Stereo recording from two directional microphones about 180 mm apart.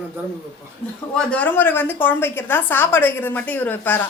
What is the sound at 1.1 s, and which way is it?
A woman's voice, 10° left (ahead or behind).